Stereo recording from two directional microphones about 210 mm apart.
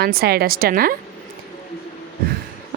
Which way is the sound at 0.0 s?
45° right (ahead or behind).